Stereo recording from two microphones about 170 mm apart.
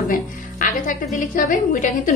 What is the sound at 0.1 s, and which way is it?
A woman's voice, 50° left (ahead or behind).